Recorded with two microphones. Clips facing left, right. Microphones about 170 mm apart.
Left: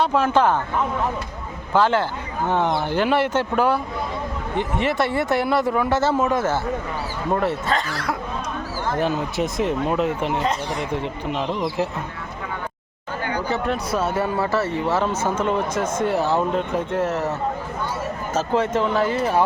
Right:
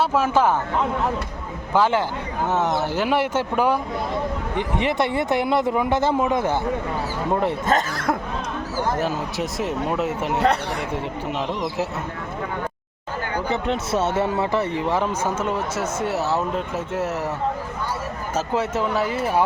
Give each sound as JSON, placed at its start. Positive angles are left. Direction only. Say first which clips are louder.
{"t": 0.0, "sound": "speech", "louder": "left 1 dB", "side_deg": -5}
{"t": 1.7, "sound": "speech", "louder": "left 1 dB", "side_deg": -10}
{"t": 7.7, "sound": "speech", "louder": "right 3 dB", "side_deg": -45}
{"t": 9.0, "sound": "speech", "louder": "left 2 dB", "side_deg": -5}
{"t": 13.5, "sound": "speech", "louder": "right 1 dB", "side_deg": -25}
{"t": 18.3, "sound": "speech", "louder": "left 2 dB", "side_deg": -10}